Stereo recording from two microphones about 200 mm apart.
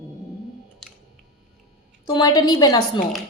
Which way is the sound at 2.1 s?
20° left (ahead or behind).